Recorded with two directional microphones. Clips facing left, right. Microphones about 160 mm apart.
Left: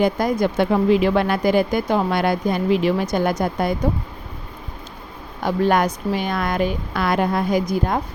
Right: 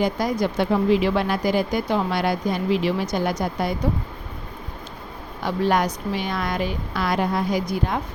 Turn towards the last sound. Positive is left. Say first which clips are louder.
# left 4 dB
turn(degrees=45)  # may be behind; listen again after turning